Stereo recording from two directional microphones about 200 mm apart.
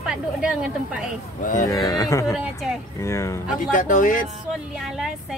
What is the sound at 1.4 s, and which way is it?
Speech, 40° left (ahead or behind).